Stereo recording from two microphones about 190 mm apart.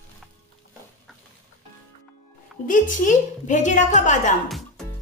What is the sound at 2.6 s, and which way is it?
A woman's voice, 45° left (ahead or behind).